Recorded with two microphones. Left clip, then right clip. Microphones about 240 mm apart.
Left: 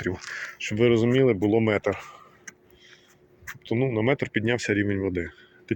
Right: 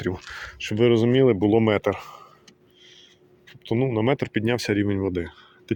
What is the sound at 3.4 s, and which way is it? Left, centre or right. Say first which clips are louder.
Speech: right 2 dB; centre.